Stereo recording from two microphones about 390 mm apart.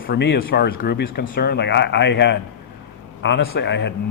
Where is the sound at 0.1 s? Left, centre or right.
Left.